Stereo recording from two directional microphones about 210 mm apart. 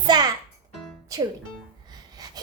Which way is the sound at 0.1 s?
20° right (ahead or behind).